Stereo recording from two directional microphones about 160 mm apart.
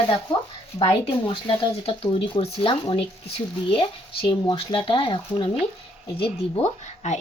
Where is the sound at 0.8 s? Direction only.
35° left (ahead or behind).